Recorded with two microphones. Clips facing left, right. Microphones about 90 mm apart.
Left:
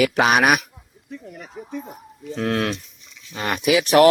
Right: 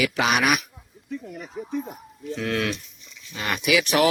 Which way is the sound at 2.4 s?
40° left (ahead or behind).